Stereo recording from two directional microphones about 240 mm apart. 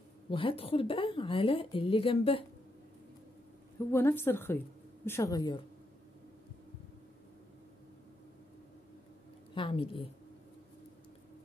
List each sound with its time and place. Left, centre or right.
0.3 s a woman's voice: left
3.9 s a woman's voice: centre
9.5 s a woman's voice: left